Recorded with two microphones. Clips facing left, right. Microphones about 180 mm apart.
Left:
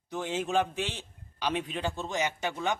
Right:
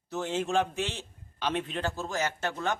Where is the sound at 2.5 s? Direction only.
10° left (ahead or behind).